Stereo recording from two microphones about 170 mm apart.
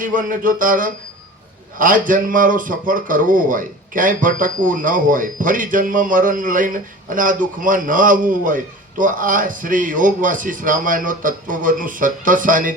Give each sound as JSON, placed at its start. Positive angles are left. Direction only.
{"t": 0.0, "sound": "a man's voice", "side_deg": -50}